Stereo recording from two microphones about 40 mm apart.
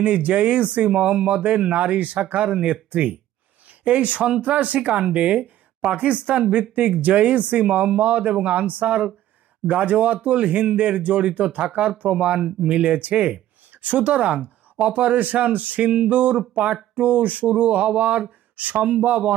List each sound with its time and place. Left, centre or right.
0.0 s speech: right